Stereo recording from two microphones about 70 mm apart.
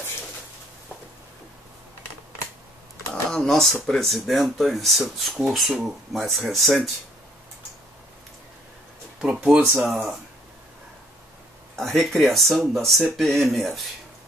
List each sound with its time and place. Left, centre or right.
3.1 s a sound: centre
3.8 s speech: centre
9.2 s speech: centre
11.7 s speech: centre